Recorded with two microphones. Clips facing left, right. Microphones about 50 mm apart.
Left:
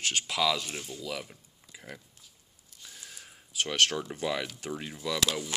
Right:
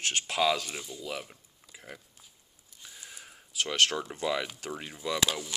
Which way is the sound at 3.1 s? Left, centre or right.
Centre.